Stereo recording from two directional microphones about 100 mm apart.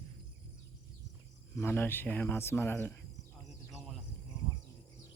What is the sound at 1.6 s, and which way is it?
Speech, 20° left (ahead or behind).